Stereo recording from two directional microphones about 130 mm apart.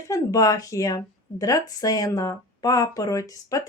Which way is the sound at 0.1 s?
25° left (ahead or behind).